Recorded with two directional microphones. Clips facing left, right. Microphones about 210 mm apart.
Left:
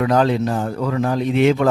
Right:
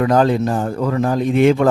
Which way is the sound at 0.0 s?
45° right (ahead or behind).